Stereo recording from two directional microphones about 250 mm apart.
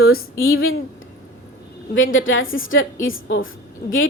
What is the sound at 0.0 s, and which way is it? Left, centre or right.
Speech, left.